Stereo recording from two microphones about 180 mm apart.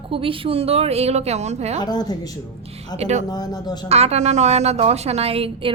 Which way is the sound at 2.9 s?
35° right (ahead or behind).